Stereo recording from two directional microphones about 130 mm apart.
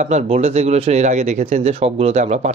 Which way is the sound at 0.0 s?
65° right (ahead or behind).